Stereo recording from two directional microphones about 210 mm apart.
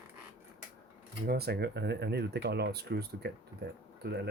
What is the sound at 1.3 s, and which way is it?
Speech, 50° right (ahead or behind).